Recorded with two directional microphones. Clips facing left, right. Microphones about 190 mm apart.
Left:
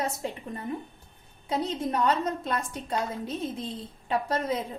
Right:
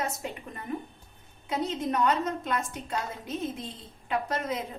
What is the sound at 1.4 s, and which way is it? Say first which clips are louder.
A woman's voice: left 1 dB; 30° left (ahead or behind).